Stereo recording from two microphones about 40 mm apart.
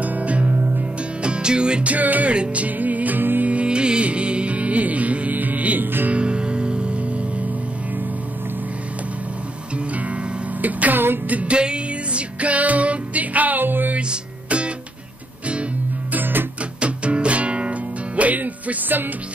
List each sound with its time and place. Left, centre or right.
0.0 s music: right
1.2 s music: right
1.9 s music: right
2.3 s music: right
3.2 s music: right
3.4 s music: right
6.0 s music: right
10.6 s music: right
11.5 s music: right
16.1 s music: right
16.8 s music: right